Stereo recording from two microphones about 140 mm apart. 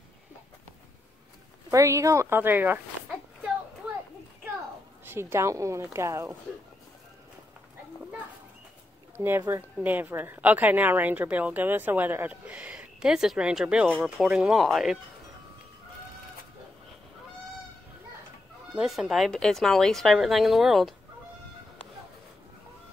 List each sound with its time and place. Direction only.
1.7 s speech: 20° right (ahead or behind)
5.0 s speech: 15° right (ahead or behind)
9.1 s a woman's voice: 15° right (ahead or behind); by 15.0 s centre (ahead or behind)
18.8 s speech: centre (ahead or behind)